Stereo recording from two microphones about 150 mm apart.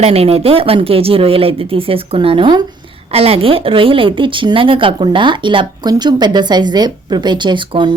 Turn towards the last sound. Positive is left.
turn(degrees=-35)  # may be behind; listen again after turning